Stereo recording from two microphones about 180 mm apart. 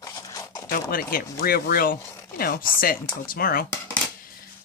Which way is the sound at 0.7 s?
55° left (ahead or behind).